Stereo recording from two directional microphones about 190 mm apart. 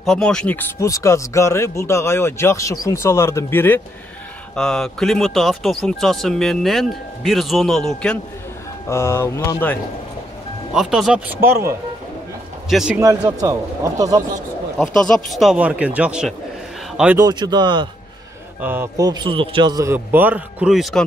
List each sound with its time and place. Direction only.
0.0 s speech: 5° left (ahead or behind)
8.8 s speech: 15° left (ahead or behind)
10.7 s speech: centre (ahead or behind)
12.6 s speech: centre (ahead or behind)
13.0 s a man's voice: 20° right (ahead or behind)
15.0 s speech: 5° left (ahead or behind)
17.2 s a man's voice: 20° right (ahead or behind)
18.6 s a man's voice: 10° right (ahead or behind)